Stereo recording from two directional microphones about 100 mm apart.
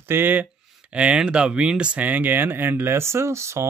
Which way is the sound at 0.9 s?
10° right (ahead or behind).